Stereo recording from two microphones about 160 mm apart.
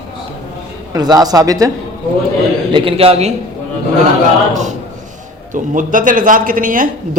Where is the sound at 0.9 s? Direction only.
25° right (ahead or behind).